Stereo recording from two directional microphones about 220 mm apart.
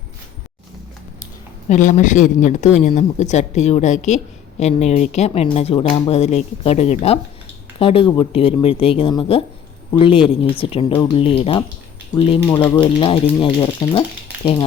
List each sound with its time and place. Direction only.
1.7 s speech: 35° left (ahead or behind)
12.5 s speech: 10° left (ahead or behind)
12.8 s speech: 25° left (ahead or behind)